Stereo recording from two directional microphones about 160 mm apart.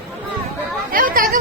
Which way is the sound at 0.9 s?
60° right (ahead or behind).